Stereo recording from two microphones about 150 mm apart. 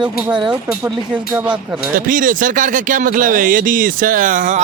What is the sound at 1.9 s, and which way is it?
Speech, 65° right (ahead or behind).